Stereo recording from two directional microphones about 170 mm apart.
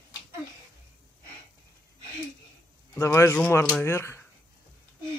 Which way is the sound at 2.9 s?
15° left (ahead or behind).